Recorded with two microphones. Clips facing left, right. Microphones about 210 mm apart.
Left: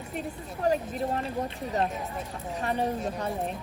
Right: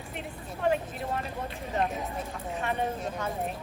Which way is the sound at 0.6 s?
40° left (ahead or behind).